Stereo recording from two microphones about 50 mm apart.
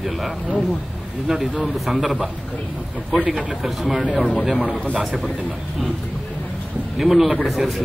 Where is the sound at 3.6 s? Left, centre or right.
Centre.